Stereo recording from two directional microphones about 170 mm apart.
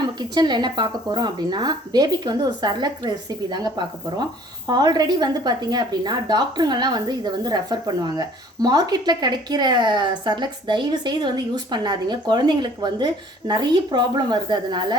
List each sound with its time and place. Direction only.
0.0 s speech: 25° right (ahead or behind)